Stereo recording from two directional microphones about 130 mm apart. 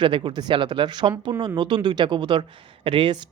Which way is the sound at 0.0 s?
40° right (ahead or behind).